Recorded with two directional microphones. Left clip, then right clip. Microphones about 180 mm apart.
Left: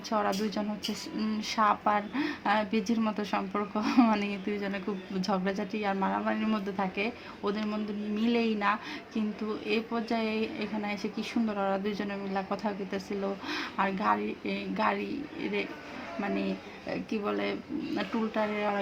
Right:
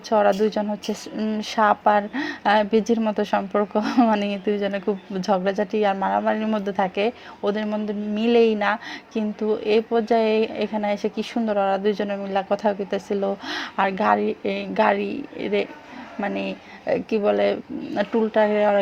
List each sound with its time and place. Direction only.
0.1 s speech: 30° right (ahead or behind)
17.1 s speech: 35° right (ahead or behind)